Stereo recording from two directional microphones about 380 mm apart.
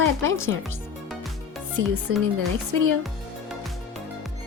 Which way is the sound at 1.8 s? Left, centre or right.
Right.